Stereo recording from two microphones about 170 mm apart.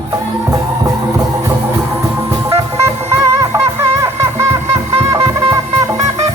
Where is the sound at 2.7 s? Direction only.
15° right (ahead or behind).